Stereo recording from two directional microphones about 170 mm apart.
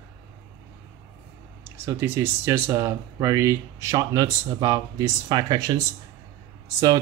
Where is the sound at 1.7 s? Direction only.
15° right (ahead or behind).